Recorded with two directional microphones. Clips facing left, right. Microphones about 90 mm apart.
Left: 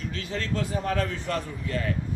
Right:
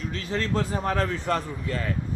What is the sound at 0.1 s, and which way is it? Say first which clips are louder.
Speech: right 4 dB; 40° right (ahead or behind).